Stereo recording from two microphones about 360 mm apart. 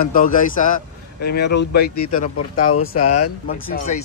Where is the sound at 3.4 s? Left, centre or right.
Left.